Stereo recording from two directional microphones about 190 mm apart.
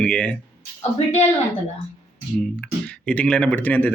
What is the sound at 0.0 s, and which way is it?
Speech, 5° left (ahead or behind).